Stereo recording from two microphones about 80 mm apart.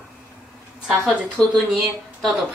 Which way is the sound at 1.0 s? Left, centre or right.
Centre.